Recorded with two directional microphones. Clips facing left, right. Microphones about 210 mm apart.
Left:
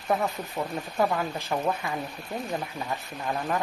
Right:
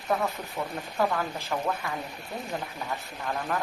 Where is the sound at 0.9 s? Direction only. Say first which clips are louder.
Left 1 dB; 20° left (ahead or behind).